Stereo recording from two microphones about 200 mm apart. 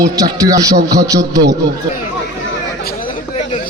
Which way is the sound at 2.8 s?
50° left (ahead or behind).